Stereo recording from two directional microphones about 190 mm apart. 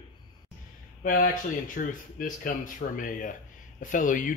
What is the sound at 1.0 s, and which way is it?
Speech, 45° left (ahead or behind).